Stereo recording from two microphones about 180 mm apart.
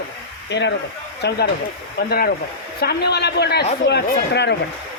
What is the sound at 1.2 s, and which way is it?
A man's voice, 65° left (ahead or behind).